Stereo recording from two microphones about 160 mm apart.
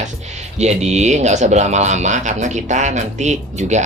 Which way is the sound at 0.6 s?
45° right (ahead or behind).